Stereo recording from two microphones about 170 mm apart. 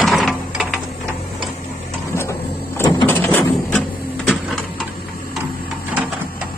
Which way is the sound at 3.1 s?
10° left (ahead or behind).